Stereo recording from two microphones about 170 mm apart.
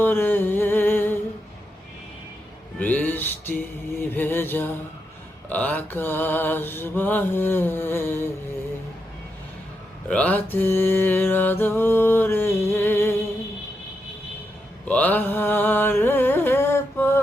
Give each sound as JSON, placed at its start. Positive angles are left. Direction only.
{"t": 0.0, "sound": "a sound", "side_deg": 10}
{"t": 2.7, "sound": "music", "side_deg": 10}
{"t": 4.1, "sound": "mantra", "side_deg": 10}
{"t": 10.1, "sound": "mantra", "side_deg": 10}
{"t": 14.8, "sound": "mantra", "side_deg": 10}